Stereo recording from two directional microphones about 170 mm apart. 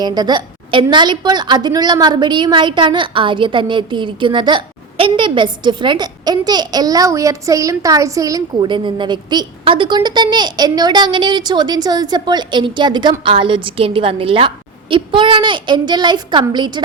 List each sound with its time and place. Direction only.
0.0 s a woman's voice: 25° right (ahead or behind)